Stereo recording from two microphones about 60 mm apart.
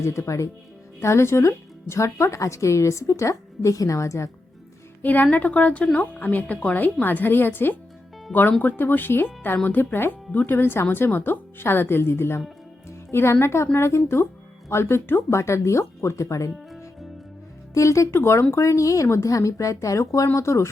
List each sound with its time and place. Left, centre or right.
0.0 s speech: left
0.9 s speech: left
5.0 s a woman's voice: left
17.7 s speech: left
18.5 s speech: left